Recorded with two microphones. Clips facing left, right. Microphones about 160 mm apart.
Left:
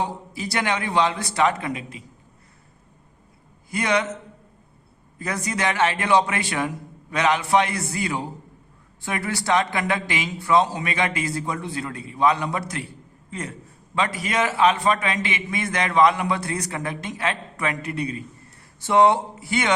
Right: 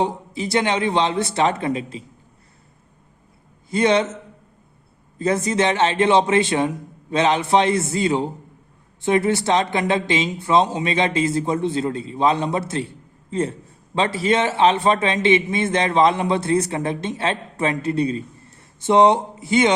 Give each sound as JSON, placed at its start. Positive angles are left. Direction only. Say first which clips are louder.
{"t": 0.0, "sound": "a man's voice", "louder": "right 5 dB", "side_deg": -20}
{"t": 3.7, "sound": "a man's voice", "louder": "right 5 dB", "side_deg": -25}
{"t": 5.1, "sound": "a man's voice", "louder": "right 8 dB", "side_deg": -25}